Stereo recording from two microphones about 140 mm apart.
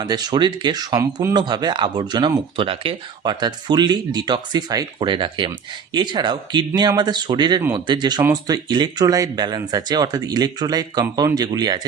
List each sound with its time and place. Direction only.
0.0 s speech: 30° right (ahead or behind)